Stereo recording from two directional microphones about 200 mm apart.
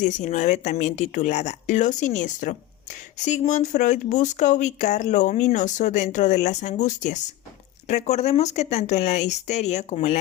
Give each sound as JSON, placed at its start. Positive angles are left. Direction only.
{"t": 0.0, "sound": "speech", "side_deg": 35}